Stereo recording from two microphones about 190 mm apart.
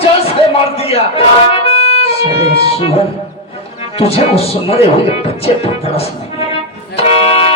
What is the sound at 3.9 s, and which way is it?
Speech, 30° left (ahead or behind).